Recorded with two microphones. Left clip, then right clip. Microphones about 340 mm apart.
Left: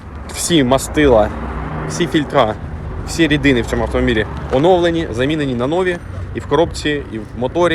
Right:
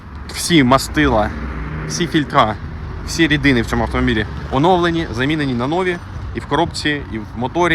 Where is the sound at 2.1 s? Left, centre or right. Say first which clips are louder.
Even; centre.